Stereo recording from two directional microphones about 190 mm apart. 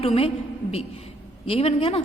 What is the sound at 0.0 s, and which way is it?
Speech, 30° left (ahead or behind).